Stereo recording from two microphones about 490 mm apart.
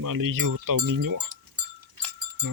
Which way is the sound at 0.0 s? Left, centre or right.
Right.